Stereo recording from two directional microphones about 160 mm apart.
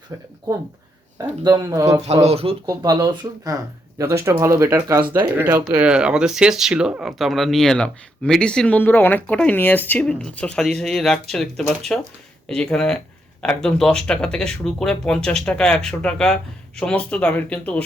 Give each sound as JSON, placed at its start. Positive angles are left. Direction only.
{"t": 0.1, "sound": "speech", "side_deg": -15}
{"t": 2.2, "sound": "speech", "side_deg": -35}
{"t": 2.6, "sound": "speech", "side_deg": -25}